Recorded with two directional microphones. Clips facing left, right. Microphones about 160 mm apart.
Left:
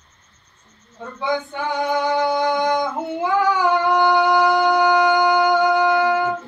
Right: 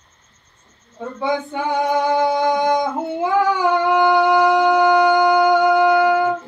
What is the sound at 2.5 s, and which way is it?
Yodeling, 15° right (ahead or behind).